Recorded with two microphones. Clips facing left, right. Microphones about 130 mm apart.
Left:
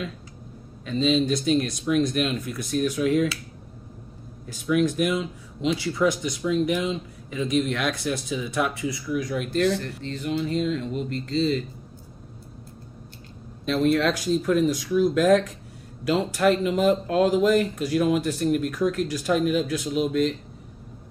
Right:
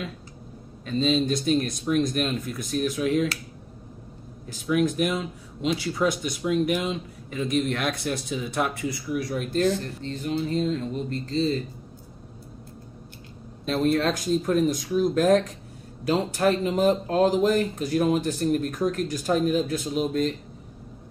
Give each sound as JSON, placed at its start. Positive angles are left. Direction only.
{"t": 0.8, "sound": "speech", "side_deg": -45}
{"t": 4.6, "sound": "speech", "side_deg": -45}
{"t": 13.7, "sound": "speech", "side_deg": -40}